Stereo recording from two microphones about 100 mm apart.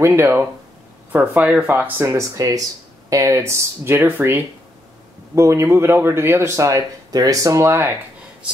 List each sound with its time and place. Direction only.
0.0 s speech: 20° right (ahead or behind)